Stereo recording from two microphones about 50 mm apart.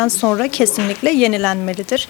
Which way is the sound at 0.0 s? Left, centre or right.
Centre.